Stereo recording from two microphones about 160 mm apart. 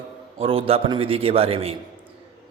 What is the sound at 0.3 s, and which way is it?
Speech, 35° right (ahead or behind).